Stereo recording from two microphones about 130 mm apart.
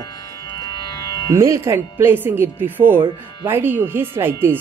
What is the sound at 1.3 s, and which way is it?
Speech, 20° right (ahead or behind).